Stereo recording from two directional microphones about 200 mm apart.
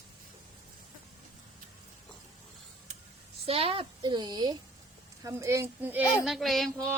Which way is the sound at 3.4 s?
30° right (ahead or behind).